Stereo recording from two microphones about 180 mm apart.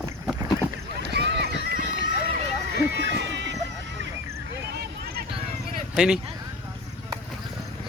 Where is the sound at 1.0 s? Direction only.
70° right (ahead or behind).